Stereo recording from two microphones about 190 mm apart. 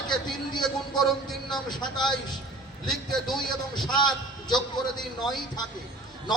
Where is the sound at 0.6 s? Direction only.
Centre (ahead or behind).